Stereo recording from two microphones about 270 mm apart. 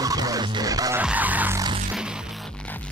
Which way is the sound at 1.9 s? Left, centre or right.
Centre.